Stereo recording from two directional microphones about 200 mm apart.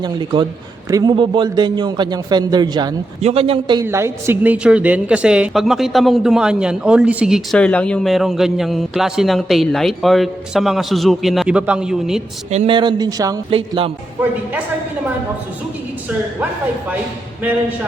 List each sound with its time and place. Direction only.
0.0 s a man's voice: 20° right (ahead or behind)
3.8 s a woman's voice: 10° right (ahead or behind)
12.5 s a man's voice: 30° right (ahead or behind)